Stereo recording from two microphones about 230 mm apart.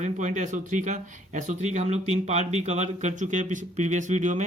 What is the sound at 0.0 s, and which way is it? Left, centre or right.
Speech, right.